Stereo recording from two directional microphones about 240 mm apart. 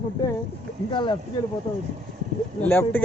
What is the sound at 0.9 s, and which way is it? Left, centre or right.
Speech, centre.